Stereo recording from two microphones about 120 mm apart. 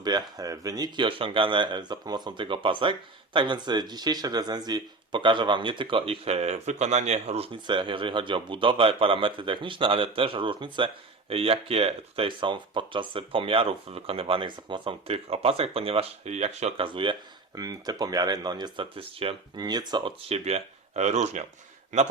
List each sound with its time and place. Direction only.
0.0 s speech: 35° right (ahead or behind); by 16.8 s 65° right (ahead or behind)
16.8 s speech: 45° right (ahead or behind)
17.5 s speech: 30° right (ahead or behind)
18.9 s speech: 50° right (ahead or behind)
19.5 s speech: 35° right (ahead or behind)
20.2 s speech: 60° right (ahead or behind)
21.9 s a man's voice: 90° right